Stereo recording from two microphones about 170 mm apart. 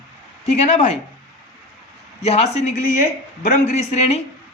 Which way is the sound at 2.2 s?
40° left (ahead or behind).